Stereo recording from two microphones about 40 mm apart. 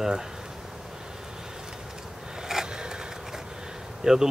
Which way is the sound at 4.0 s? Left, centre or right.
Centre.